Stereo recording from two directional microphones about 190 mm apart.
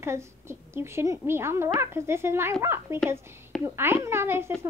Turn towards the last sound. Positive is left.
turn(degrees=-10)  # may be behind; listen again after turning